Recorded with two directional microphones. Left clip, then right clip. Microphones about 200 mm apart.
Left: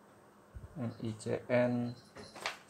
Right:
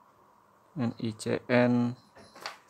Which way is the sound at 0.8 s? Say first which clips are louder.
Right 8 dB; 45° right (ahead or behind).